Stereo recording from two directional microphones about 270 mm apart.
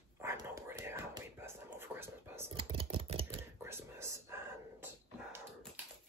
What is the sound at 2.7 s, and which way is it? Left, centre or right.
Computer keyboard, centre.